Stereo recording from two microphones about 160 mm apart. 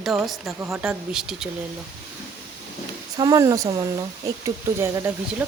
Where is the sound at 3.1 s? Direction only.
25° right (ahead or behind).